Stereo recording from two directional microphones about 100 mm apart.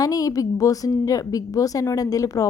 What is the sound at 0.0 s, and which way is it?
A woman's voice, 35° left (ahead or behind).